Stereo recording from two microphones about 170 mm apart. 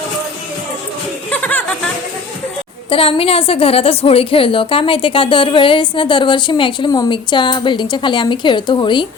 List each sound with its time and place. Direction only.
1.3 s chuckle: 10° left (ahead or behind)
2.9 s a woman's voice: 35° left (ahead or behind)